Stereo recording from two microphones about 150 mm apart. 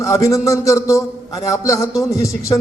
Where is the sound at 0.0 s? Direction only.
20° left (ahead or behind).